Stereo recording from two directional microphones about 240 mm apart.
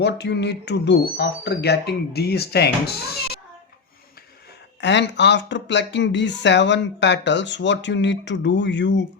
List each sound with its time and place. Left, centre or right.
0.0 s speech: left
4.8 s speech: left